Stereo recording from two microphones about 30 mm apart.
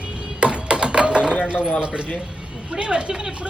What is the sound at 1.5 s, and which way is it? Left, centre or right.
Speech, right.